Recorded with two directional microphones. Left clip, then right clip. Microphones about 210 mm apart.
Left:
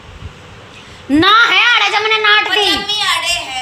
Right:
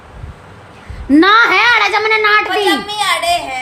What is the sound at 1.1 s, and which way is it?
A woman's voice, 20° right (ahead or behind).